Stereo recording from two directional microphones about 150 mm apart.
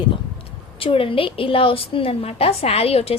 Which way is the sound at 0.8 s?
35° left (ahead or behind).